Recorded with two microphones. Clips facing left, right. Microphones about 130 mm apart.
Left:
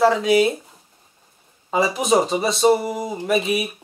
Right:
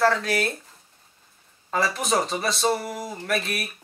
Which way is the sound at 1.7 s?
5° left (ahead or behind).